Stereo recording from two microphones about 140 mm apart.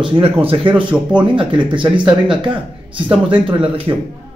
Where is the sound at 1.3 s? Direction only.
35° right (ahead or behind).